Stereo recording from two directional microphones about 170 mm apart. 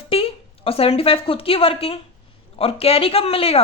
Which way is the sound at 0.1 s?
35° left (ahead or behind).